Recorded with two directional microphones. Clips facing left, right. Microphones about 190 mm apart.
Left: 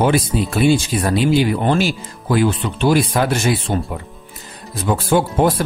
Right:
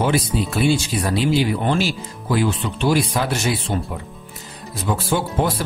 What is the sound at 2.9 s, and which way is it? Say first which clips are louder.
Speech: left 4 dB; 50° left (ahead or behind).